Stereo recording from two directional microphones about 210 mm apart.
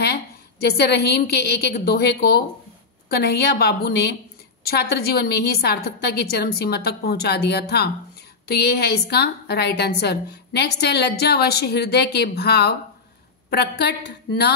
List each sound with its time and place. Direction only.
0.0 s a woman's voice: 50° left (ahead or behind)